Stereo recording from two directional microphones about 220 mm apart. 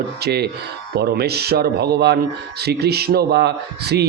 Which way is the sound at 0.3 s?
50° right (ahead or behind).